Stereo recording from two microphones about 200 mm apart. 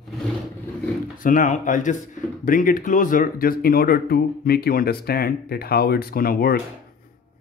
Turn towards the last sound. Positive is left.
turn(degrees=50)  # may be behind; listen again after turning